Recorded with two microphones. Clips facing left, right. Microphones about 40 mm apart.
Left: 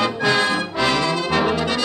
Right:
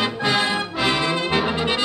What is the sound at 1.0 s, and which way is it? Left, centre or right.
Brass instrument, right.